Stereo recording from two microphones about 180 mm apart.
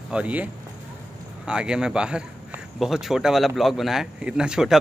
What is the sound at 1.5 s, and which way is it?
A man's voice, 5° right (ahead or behind).